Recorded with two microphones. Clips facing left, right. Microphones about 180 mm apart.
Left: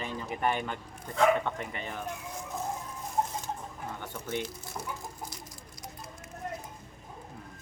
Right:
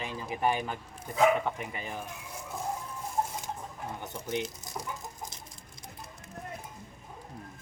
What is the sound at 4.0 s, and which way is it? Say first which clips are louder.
Speech: right 1 dB; 20° right (ahead or behind).